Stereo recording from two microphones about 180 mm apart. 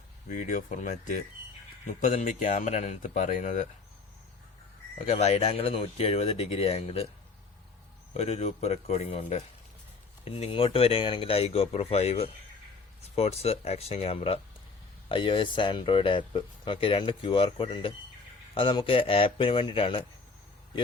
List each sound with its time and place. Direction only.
0.3 s speech: 45° left (ahead or behind)
5.0 s speech: 35° left (ahead or behind)
8.1 s speech: 35° left (ahead or behind)